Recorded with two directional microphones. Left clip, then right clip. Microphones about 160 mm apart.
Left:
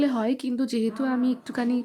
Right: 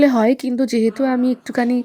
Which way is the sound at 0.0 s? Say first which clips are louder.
Right 11 dB; 40° right (ahead or behind).